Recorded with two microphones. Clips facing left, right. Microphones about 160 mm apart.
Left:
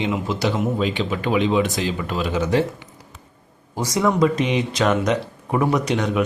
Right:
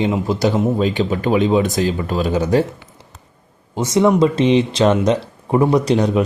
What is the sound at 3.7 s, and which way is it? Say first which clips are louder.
A man's voice: right 5 dB; 25° right (ahead or behind).